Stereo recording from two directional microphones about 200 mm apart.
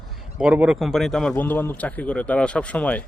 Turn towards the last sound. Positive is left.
turn(degrees=5)  # may be behind; listen again after turning